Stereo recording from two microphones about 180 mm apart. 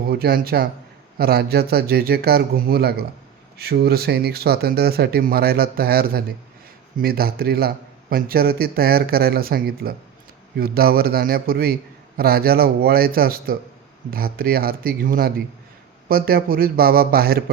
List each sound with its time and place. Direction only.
0.1 s a man's voice: 55° right (ahead or behind)